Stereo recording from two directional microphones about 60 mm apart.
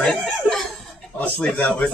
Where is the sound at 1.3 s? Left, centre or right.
Left.